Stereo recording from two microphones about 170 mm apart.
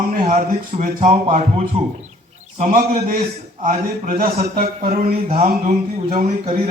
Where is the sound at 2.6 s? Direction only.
50° right (ahead or behind).